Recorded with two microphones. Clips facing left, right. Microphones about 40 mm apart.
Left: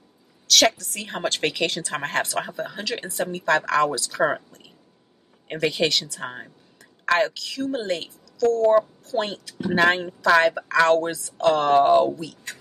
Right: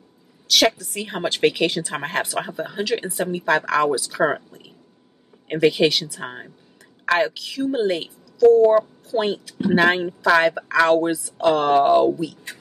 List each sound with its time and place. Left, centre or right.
0.5 s a woman's voice: centre